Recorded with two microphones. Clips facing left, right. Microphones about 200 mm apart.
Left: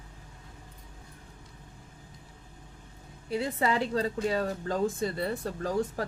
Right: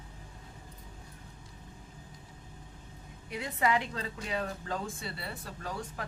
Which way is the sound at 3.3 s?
30° left (ahead or behind).